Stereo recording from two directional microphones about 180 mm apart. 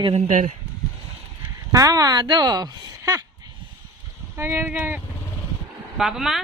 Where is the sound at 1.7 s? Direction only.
20° right (ahead or behind).